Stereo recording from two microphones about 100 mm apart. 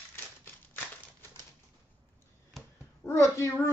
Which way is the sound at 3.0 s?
25° left (ahead or behind).